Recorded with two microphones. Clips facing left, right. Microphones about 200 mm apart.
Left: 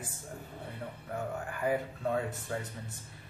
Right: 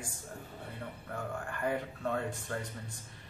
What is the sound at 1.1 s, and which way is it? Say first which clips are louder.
Speech: left 3 dB; 5° left (ahead or behind).